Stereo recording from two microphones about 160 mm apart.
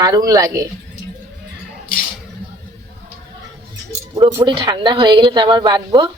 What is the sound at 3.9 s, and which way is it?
Speech, 20° right (ahead or behind).